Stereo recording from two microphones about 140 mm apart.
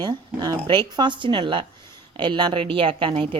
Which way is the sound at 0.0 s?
30° right (ahead or behind).